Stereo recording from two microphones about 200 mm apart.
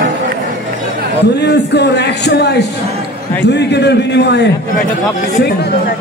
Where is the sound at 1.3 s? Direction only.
55° left (ahead or behind).